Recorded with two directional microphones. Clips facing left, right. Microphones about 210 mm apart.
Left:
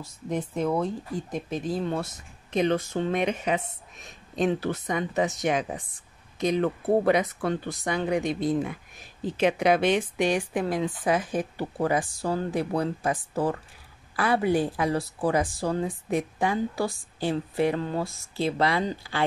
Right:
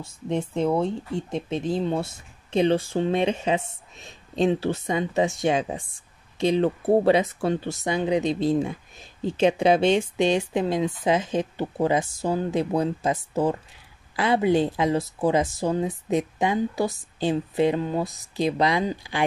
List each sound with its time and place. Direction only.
0.0 s speech: 25° right (ahead or behind)